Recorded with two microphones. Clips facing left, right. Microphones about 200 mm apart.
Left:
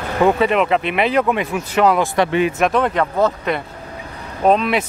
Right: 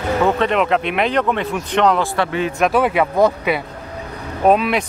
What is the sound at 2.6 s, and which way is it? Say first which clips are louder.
Speech: right 1 dB; 5° right (ahead or behind).